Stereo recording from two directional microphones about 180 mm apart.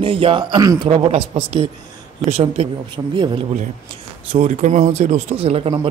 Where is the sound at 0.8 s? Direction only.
35° right (ahead or behind).